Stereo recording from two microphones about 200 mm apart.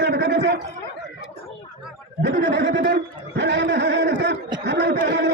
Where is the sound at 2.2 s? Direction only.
60° right (ahead or behind).